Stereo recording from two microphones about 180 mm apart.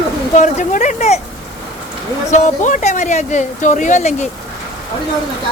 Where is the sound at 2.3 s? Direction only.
40° left (ahead or behind).